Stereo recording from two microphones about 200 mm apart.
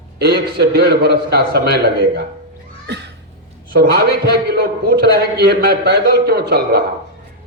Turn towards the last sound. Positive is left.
turn(degrees=-55)  # may be behind; listen again after turning